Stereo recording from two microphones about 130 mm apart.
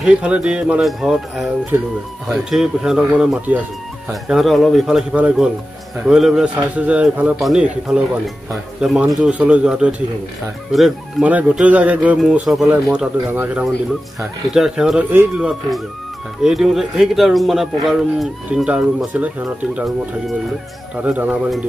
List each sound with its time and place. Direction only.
0.0 s speech: 10° right (ahead or behind)
11.2 s speech: 10° right (ahead or behind)
14.5 s speech: 5° right (ahead or behind)
21.0 s speech: 10° right (ahead or behind)